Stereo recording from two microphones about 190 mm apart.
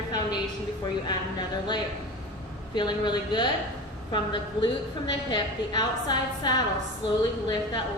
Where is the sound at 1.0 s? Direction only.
25° left (ahead or behind).